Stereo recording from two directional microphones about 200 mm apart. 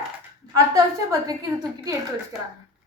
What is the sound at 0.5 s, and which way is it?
Speech, 15° right (ahead or behind).